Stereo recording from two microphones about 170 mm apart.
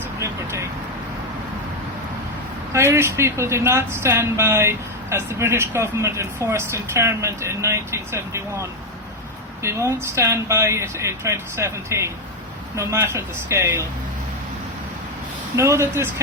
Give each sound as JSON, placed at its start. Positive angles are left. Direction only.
{"t": 0.2, "sound": "vehicle", "side_deg": -15}
{"t": 2.7, "sound": "speech", "side_deg": -15}
{"t": 9.6, "sound": "speech", "side_deg": -15}
{"t": 15.5, "sound": "speech", "side_deg": -15}